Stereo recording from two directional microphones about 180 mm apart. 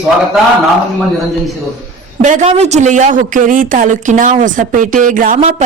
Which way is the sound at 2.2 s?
40° right (ahead or behind).